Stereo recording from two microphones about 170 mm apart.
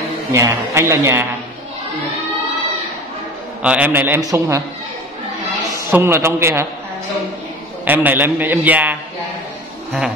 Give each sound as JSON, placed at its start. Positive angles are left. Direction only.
{"t": 0.3, "sound": "a man's voice", "side_deg": -15}
{"t": 3.6, "sound": "a man's voice", "side_deg": -10}
{"t": 5.9, "sound": "a man's voice", "side_deg": -15}
{"t": 7.8, "sound": "a man's voice", "side_deg": -10}